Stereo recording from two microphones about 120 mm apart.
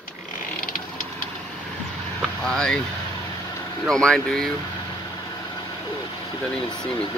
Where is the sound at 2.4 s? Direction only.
5° left (ahead or behind).